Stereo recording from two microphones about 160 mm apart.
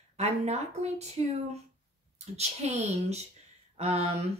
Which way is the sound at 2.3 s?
45° right (ahead or behind).